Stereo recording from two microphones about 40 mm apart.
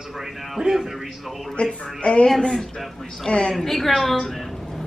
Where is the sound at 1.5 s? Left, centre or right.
Left.